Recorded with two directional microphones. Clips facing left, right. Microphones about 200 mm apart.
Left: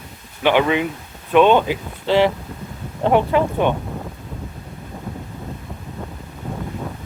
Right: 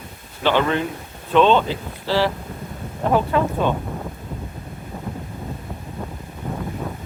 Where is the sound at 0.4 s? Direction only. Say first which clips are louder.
Left 3 dB; 15° left (ahead or behind).